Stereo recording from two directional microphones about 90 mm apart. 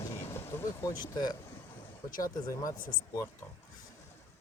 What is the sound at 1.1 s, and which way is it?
Speech, 50° left (ahead or behind).